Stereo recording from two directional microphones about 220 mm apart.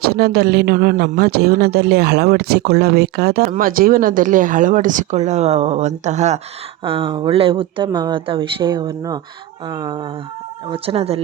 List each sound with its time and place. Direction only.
0.0 s speech: 45° right (ahead or behind); by 11.2 s 25° right (ahead or behind)